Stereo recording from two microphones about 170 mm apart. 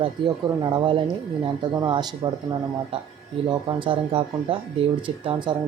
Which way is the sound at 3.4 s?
30° right (ahead or behind).